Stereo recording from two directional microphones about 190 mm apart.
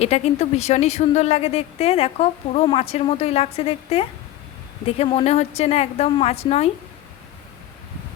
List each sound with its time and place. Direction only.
0.0 s a woman's voice: 35° left (ahead or behind)